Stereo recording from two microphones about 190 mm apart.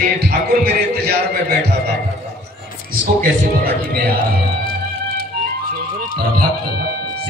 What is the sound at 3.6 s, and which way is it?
Speech, 50° right (ahead or behind).